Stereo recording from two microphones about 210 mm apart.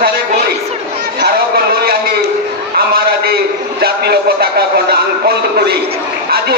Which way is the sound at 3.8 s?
50° right (ahead or behind).